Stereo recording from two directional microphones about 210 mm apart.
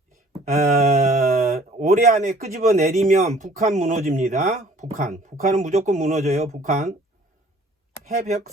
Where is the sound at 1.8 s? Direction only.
35° right (ahead or behind).